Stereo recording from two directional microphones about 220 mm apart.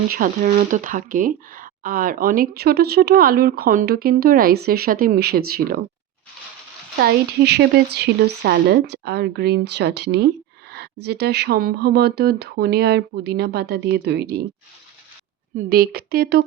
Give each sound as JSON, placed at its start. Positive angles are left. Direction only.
{"t": 0.1, "sound": "speech", "side_deg": -35}
{"t": 7.0, "sound": "speech", "side_deg": -50}
{"t": 15.5, "sound": "speech", "side_deg": -45}